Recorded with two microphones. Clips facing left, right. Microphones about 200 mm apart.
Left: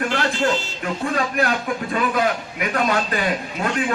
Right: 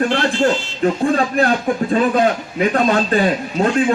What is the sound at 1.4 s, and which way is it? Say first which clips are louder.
A man's voice: right 6 dB; 30° right (ahead or behind).